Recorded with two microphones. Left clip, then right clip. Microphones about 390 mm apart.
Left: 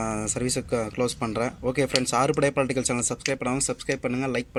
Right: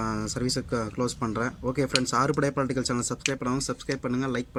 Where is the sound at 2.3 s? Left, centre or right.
Centre.